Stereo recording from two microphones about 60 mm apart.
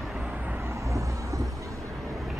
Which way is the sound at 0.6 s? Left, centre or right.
Right.